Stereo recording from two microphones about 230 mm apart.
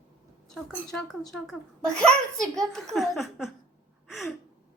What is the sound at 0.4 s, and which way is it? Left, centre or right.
A child's voice, centre.